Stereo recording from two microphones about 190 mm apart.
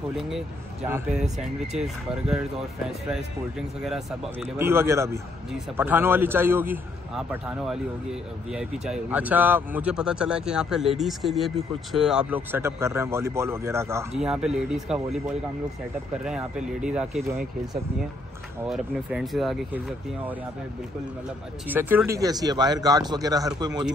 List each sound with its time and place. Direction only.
0.1 s speech: centre (ahead or behind)
3.5 s speech: 5° right (ahead or behind)
14.1 s speech: 5° right (ahead or behind)
18.7 s speech: centre (ahead or behind)
21.6 s speech: 10° right (ahead or behind)